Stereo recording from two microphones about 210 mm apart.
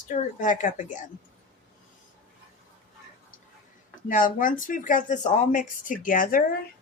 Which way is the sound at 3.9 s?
40° left (ahead or behind).